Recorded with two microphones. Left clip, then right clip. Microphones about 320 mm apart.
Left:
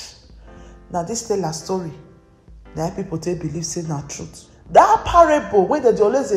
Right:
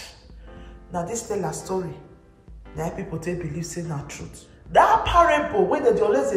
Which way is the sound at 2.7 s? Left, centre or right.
Centre.